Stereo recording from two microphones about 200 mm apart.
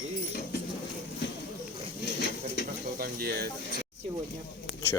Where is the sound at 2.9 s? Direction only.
50° right (ahead or behind).